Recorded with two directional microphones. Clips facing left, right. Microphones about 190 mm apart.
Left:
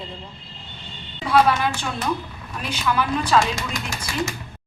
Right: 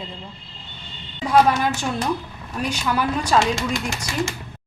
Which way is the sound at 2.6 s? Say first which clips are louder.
Right 1 dB; 45° right (ahead or behind).